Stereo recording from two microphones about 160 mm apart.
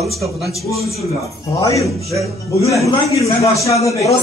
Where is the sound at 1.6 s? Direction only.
20° left (ahead or behind).